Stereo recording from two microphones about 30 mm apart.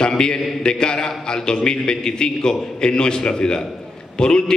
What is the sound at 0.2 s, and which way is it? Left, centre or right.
A man's voice, left.